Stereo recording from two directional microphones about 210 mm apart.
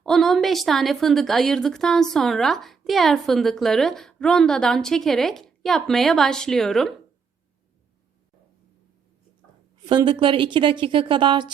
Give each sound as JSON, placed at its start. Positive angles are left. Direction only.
{"t": 0.0, "sound": "a woman's voice", "side_deg": 0}
{"t": 9.8, "sound": "a woman's voice", "side_deg": -20}